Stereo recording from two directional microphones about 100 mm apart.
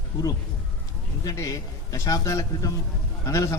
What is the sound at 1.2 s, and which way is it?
A man's voice, 35° left (ahead or behind).